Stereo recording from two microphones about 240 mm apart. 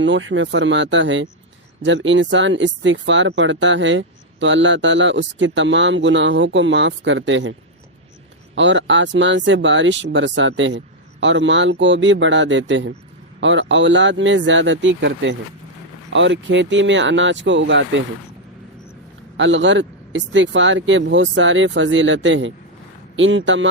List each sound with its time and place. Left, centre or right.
0.0 s speech: right
8.5 s speech: right
19.4 s speech: right